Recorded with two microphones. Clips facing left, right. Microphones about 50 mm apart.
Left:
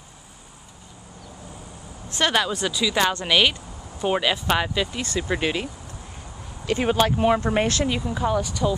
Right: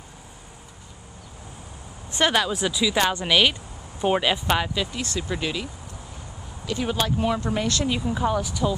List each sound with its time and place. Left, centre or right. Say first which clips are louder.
2.0 s a sound: right 1 dB; centre
2.3 s speech: even; centre
4.6 s speech: left 2 dB; centre
5.3 s speech: left 4 dB; left
8.0 s speech: even; centre